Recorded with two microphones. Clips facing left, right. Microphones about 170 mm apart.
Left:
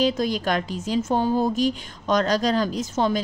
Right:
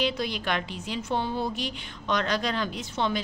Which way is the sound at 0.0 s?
45° left (ahead or behind).